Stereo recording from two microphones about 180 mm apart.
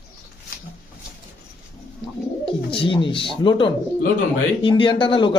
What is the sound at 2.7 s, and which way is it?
Speech, 30° left (ahead or behind).